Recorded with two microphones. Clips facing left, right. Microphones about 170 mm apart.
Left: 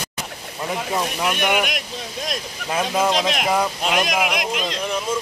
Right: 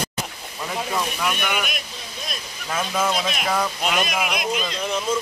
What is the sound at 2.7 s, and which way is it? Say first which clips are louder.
Speech: left 3 dB; 20° left (ahead or behind).